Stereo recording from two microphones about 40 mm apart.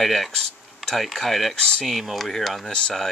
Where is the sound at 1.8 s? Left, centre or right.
Centre.